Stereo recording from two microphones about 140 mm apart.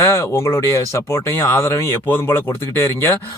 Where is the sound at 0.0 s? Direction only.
20° left (ahead or behind).